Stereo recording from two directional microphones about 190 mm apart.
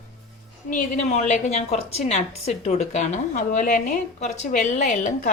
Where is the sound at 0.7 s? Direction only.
40° left (ahead or behind).